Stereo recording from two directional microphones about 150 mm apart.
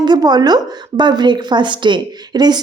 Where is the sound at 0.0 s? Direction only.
30° right (ahead or behind).